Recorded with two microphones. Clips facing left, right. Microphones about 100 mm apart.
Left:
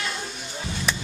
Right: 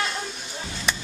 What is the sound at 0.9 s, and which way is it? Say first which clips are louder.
Chop: right 1 dB; centre (ahead or behind).